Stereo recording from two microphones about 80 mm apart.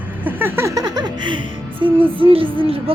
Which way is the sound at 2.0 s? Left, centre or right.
Right.